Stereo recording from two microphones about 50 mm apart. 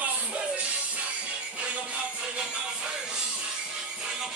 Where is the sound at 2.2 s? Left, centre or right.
Centre.